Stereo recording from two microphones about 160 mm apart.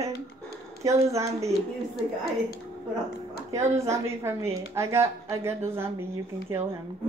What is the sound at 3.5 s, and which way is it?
A woman's voice, 15° right (ahead or behind).